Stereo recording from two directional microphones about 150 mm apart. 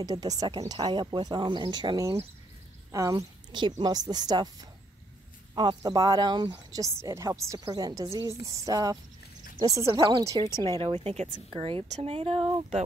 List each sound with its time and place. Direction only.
0.0 s speech: 25° right (ahead or behind)
5.5 s speech: 25° right (ahead or behind)